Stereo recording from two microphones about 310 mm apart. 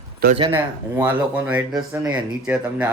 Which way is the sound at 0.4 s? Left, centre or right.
Centre.